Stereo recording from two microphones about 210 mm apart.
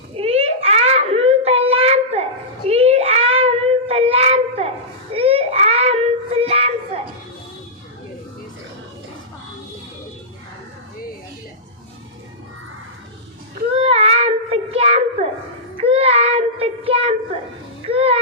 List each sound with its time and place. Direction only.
0.2 s a sound: 30° right (ahead or behind)
2.6 s child singing: 30° right (ahead or behind)
13.7 s child singing: 25° right (ahead or behind)
17.8 s music: 30° right (ahead or behind)